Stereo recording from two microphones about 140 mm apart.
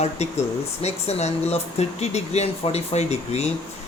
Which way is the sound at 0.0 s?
50° left (ahead or behind).